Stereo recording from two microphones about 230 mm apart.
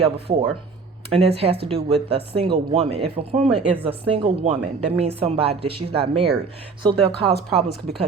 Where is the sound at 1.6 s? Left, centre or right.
Right.